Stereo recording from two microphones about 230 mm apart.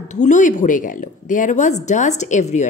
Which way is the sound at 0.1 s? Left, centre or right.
Left.